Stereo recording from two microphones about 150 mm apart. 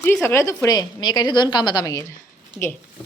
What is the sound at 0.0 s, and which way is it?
A woman's voice, 15° left (ahead or behind).